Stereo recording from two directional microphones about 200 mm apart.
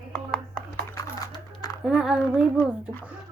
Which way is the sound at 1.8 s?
5° right (ahead or behind).